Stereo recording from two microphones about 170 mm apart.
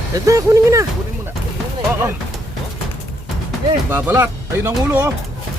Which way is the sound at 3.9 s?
10° right (ahead or behind).